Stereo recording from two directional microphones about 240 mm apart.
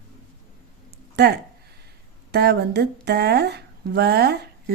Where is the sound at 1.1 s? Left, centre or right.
Right.